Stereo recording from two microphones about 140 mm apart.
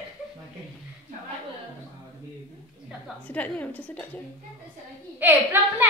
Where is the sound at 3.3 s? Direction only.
10° left (ahead or behind).